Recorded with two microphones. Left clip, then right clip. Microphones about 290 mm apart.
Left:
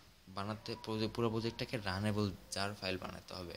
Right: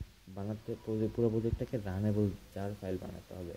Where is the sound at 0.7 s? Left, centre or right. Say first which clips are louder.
Right 7 dB; left.